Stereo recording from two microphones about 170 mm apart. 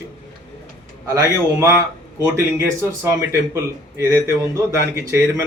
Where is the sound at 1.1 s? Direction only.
20° right (ahead or behind).